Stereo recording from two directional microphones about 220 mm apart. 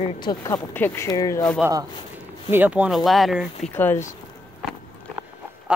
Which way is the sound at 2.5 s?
5° right (ahead or behind).